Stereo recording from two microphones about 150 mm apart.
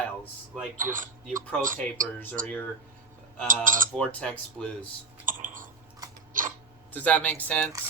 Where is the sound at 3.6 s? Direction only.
65° right (ahead or behind).